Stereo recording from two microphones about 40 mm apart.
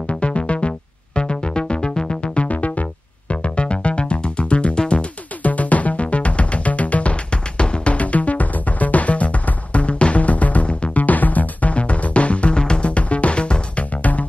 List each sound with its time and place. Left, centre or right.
0.1 s music: left
2.4 s music: left
5.4 s music: left
11.1 s music: left
11.7 s music: left